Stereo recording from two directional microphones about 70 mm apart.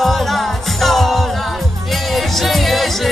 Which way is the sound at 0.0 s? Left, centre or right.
Centre.